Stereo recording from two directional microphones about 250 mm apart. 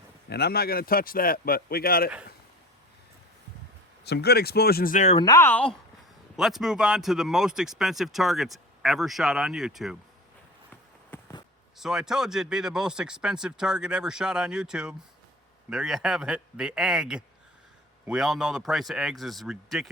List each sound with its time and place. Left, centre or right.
0.3 s speech: left
4.0 s speech: left
5.2 s speech: centre
11.1 s a sound: centre
11.8 s speech: centre